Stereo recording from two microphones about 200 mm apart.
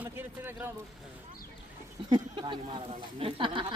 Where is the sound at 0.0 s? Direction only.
10° right (ahead or behind).